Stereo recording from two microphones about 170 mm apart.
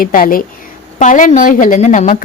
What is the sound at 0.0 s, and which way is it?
A woman's voice, 55° left (ahead or behind).